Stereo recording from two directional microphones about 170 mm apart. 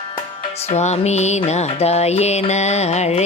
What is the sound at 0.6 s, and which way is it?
Music, 40° left (ahead or behind).